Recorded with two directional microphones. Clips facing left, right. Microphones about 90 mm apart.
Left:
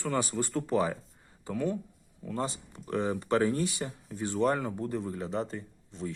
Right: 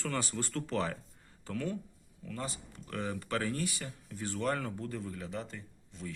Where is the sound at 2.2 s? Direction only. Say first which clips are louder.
Left 7 dB; 30° left (ahead or behind).